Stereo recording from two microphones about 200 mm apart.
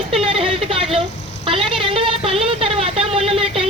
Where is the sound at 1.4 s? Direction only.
25° right (ahead or behind).